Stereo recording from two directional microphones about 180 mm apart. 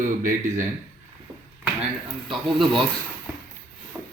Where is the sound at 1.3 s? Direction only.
10° right (ahead or behind).